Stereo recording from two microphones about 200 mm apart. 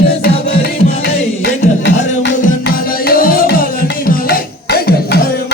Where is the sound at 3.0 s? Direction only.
45° left (ahead or behind).